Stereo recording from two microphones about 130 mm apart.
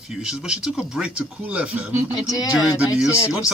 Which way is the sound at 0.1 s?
5° right (ahead or behind).